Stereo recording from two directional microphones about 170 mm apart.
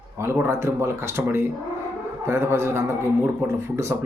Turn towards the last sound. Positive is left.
turn(degrees=-15)  # may be behind; listen again after turning